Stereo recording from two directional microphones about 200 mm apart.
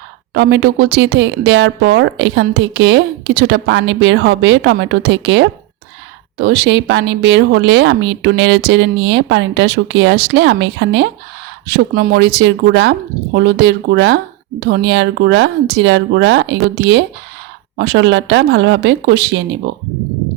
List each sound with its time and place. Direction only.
0.3 s a woman's voice: 60° right (ahead or behind)
11.9 s a woman's voice: 55° right (ahead or behind)